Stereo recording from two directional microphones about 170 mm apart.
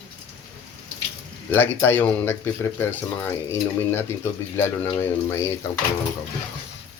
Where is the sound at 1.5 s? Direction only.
10° left (ahead or behind).